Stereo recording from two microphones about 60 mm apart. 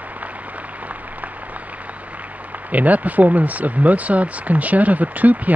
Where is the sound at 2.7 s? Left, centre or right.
Right.